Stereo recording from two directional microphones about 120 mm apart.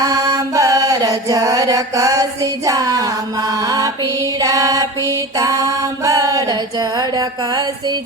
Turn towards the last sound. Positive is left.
turn(degrees=-35)  # may be behind; listen again after turning